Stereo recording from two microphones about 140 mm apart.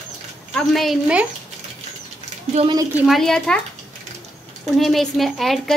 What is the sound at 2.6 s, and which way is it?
Speech, 45° right (ahead or behind).